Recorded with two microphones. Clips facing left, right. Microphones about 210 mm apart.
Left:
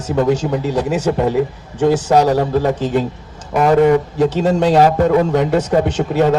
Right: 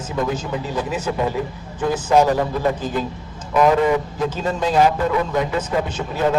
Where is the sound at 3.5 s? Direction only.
50° left (ahead or behind).